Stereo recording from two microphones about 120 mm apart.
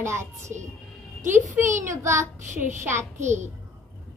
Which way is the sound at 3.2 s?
80° right.